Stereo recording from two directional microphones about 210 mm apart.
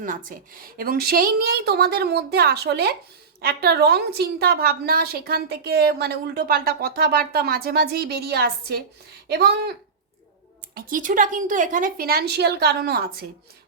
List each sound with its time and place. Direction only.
0.0 s a woman's voice: 40° right (ahead or behind)
10.8 s a woman's voice: 40° right (ahead or behind)